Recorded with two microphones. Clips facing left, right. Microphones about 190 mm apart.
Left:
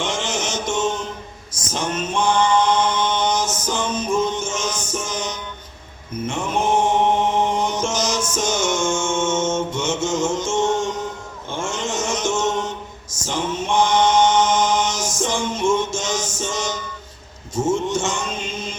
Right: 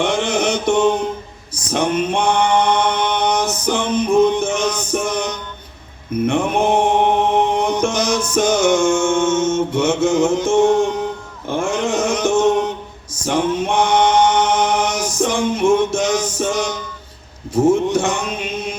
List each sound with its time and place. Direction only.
0.0 s mantra: 60° right (ahead or behind)
1.7 s male singing: 65° right (ahead or behind)
6.2 s mantra: 60° right (ahead or behind)
11.4 s a sound: 60° right (ahead or behind)
13.2 s chant: 60° right (ahead or behind)
17.5 s music: 60° right (ahead or behind)